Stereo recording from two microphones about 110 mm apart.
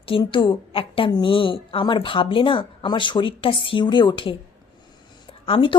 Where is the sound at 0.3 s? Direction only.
50° left (ahead or behind).